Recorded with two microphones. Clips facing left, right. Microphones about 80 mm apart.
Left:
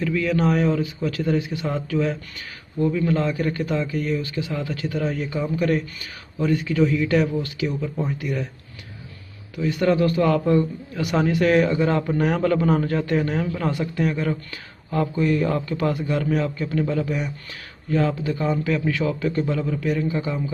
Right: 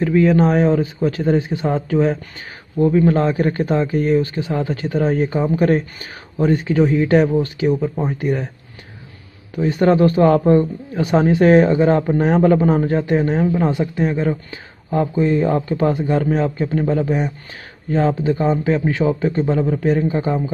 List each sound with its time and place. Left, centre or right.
0.0 s a man's voice: right
9.6 s a man's voice: right